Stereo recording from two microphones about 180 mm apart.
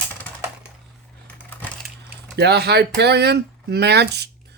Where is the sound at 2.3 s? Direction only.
65° right (ahead or behind).